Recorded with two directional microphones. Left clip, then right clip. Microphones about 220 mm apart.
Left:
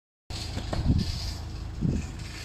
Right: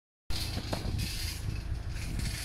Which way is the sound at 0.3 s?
20° right (ahead or behind).